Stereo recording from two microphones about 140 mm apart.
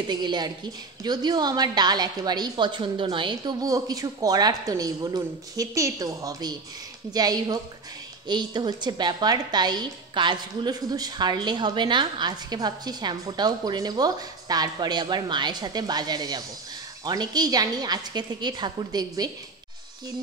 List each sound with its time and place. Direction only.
0.1 s a woman's voice: 30° right (ahead or behind)